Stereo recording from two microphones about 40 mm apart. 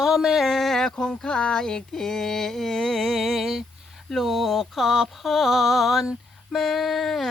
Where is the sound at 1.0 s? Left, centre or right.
Left; by 6.1 s centre.